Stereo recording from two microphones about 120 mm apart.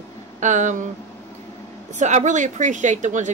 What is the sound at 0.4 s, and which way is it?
Speech, 90° right.